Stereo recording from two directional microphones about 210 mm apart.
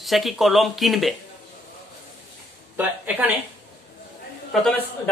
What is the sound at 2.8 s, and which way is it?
Speech, 10° right (ahead or behind).